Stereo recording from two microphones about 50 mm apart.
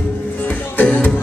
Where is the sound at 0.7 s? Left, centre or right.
Left.